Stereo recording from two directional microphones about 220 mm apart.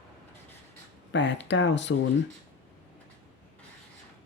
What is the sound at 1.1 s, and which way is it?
Speech, 55° left (ahead or behind).